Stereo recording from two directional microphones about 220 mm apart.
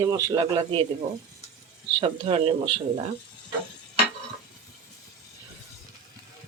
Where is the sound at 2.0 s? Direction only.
25° right (ahead or behind).